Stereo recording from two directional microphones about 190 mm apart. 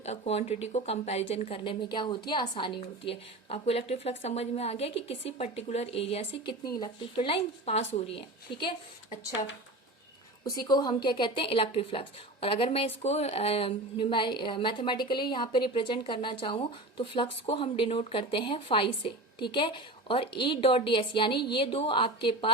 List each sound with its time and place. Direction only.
0.0 s a woman's voice: 35° left (ahead or behind)
10.4 s a woman's voice: 20° left (ahead or behind)